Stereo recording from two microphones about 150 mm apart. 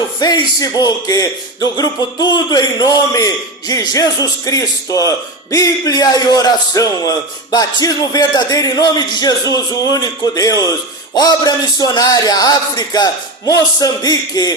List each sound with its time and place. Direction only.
0.2 s speech: 25° left (ahead or behind)